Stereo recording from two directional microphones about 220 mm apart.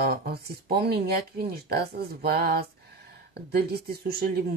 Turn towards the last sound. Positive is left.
turn(degrees=-45)  # may be behind; listen again after turning